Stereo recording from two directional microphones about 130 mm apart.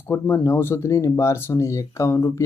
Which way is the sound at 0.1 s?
20° left (ahead or behind).